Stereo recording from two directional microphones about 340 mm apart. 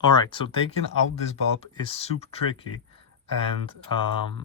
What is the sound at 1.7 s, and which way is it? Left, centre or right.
Speech, centre.